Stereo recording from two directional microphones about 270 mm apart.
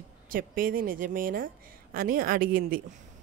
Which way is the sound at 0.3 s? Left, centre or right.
Right.